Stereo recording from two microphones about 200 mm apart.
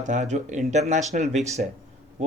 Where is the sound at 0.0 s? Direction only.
40° right (ahead or behind).